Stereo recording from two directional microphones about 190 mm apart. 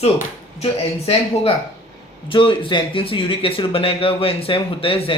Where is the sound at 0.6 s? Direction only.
30° left (ahead or behind).